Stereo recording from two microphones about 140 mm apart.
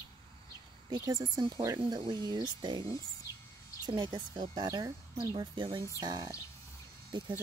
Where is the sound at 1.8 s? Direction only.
35° right (ahead or behind).